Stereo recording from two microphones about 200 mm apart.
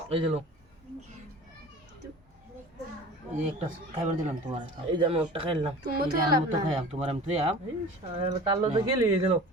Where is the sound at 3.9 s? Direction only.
35° right (ahead or behind).